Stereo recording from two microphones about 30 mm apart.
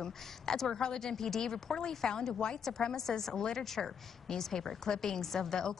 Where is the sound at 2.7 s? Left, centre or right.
Centre.